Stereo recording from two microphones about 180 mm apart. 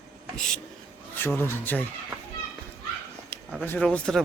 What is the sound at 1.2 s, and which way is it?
Speech, 10° left (ahead or behind).